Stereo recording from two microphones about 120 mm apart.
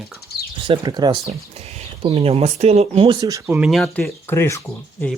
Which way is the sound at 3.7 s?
Centre (ahead or behind).